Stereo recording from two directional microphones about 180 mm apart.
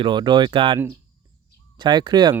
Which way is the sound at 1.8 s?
25° right (ahead or behind).